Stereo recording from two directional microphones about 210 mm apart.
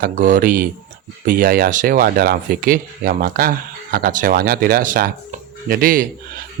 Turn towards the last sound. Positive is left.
turn(degrees=-45)  # may be behind; listen again after turning